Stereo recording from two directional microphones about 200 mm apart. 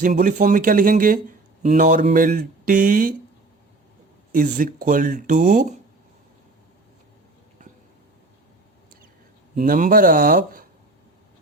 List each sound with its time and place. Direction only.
0.0 s speech: 40° right (ahead or behind)
4.4 s speech: 40° right (ahead or behind)
9.6 s speech: 40° right (ahead or behind)